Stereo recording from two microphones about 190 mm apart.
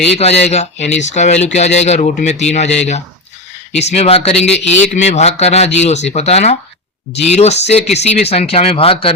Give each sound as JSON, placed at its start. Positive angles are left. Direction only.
{"t": 0.2, "sound": "speech", "side_deg": 35}